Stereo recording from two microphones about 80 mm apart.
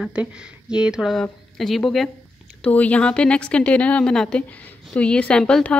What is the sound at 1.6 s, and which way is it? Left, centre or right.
Speech, centre.